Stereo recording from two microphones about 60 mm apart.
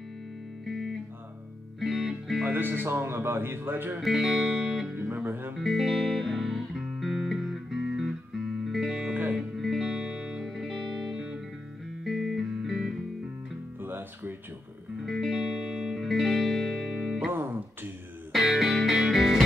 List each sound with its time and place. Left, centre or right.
0.7 s music: centre
2.5 s speech: right
4.0 s music: centre
4.9 s music: right
5.6 s music: centre
13.7 s music: right
15.0 s music: centre
17.3 s music: right
18.3 s music: centre